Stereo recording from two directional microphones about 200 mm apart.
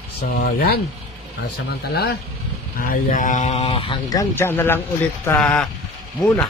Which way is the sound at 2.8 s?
45° left (ahead or behind).